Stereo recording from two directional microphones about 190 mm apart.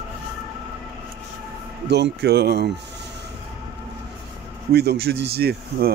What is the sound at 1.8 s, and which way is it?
Speech, 65° right (ahead or behind).